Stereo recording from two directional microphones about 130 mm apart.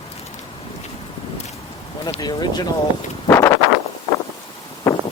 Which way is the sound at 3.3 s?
20° left (ahead or behind).